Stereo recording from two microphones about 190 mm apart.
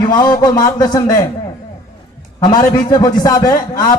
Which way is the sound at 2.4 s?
20° left (ahead or behind).